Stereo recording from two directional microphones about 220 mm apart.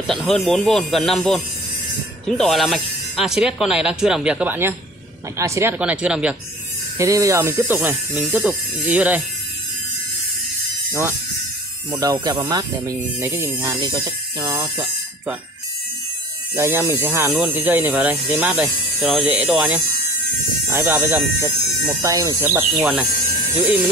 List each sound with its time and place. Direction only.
0.0 s speech: centre (ahead or behind)
10.9 s speech: 10° right (ahead or behind)
16.5 s speech: 10° right (ahead or behind)
22.8 s speech: 5° right (ahead or behind)